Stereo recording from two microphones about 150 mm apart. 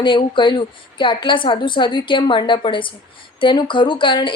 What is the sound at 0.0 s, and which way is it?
Speech, 35° left (ahead or behind).